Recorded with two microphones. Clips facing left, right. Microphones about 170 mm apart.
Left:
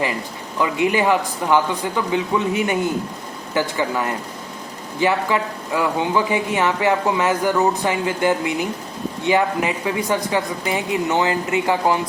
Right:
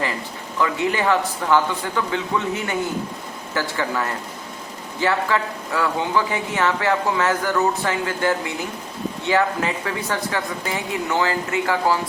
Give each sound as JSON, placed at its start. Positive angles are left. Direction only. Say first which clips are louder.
{"t": 0.6, "sound": "speech", "louder": "left 3 dB", "side_deg": 15}